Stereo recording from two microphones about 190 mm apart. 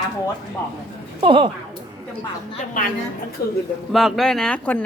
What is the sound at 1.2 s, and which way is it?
Speech, 30° right (ahead or behind).